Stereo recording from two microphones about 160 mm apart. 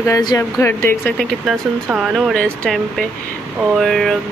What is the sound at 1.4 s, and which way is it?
Speech, centre (ahead or behind).